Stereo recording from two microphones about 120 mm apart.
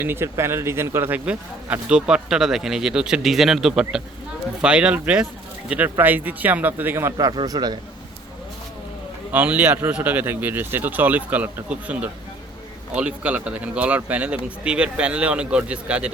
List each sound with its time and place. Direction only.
0.0 s speech: 20° right (ahead or behind)
7.3 s a man's voice: 30° right (ahead or behind)
9.3 s speech: 15° right (ahead or behind)